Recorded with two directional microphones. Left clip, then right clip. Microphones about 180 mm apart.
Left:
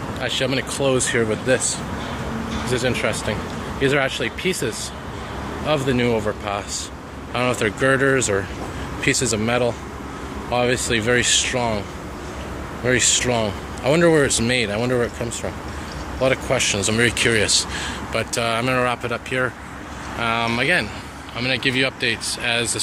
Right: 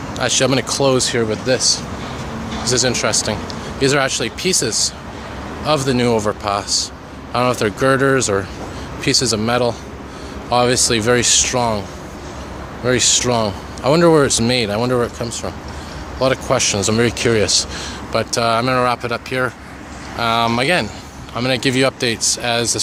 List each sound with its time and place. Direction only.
0.2 s speech: 35° right (ahead or behind); by 1.6 s 15° right (ahead or behind)
2.8 s speech: 20° right (ahead or behind)
12.8 s speech: 20° right (ahead or behind)